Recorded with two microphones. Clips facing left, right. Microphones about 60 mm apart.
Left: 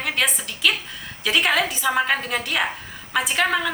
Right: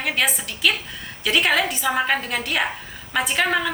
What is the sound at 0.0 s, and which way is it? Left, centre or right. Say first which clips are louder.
A woman's voice: right 1 dB; centre.